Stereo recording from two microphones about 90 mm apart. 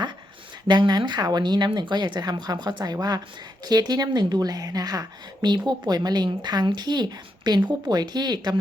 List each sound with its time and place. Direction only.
0.7 s a woman's voice: 55° right (ahead or behind)